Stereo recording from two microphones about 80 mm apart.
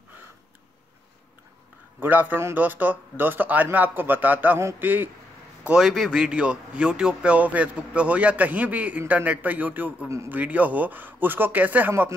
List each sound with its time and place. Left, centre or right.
2.0 s speech: right
5.6 s a man's voice: centre
10.0 s a man's voice: right
10.3 s speech: centre